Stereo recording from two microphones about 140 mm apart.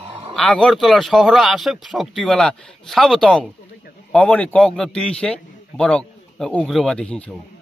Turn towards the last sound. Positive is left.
turn(degrees=10)  # may be behind; listen again after turning